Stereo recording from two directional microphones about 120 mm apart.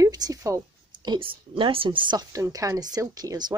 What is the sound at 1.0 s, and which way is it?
Speech, 40° right (ahead or behind).